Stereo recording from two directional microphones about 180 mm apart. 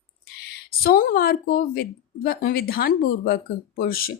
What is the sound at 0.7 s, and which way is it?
Speech, 55° left (ahead or behind).